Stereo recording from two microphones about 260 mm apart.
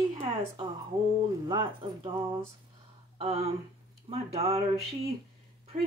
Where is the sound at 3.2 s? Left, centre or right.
Right.